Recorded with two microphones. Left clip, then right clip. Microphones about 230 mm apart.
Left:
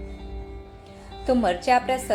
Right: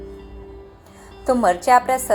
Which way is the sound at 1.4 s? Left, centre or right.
Right.